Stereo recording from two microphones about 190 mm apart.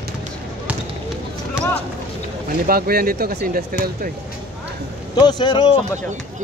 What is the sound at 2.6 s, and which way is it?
Speech, 50° right (ahead or behind).